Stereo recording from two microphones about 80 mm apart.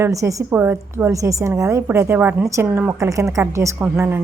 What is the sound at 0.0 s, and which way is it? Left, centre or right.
Speech, right.